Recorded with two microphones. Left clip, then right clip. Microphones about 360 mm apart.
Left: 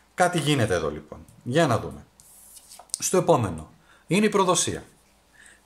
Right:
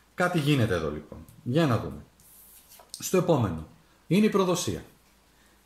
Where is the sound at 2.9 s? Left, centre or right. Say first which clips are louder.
Left 4 dB; centre.